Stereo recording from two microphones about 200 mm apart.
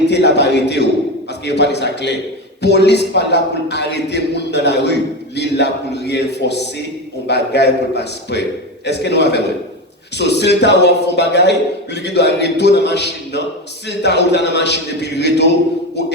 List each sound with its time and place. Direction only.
0.1 s a man's voice: 60° left (ahead or behind)